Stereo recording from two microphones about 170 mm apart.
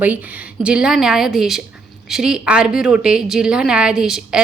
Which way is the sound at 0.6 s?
5° right (ahead or behind).